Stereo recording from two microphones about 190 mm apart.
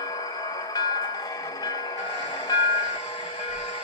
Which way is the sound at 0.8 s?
20° left (ahead or behind).